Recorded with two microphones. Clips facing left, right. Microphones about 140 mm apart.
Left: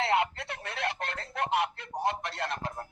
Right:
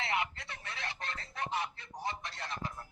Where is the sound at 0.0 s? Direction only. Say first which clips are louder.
Left 8 dB; 65° left (ahead or behind).